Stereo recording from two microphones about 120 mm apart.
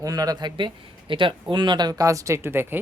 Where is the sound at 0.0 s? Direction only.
30° right (ahead or behind).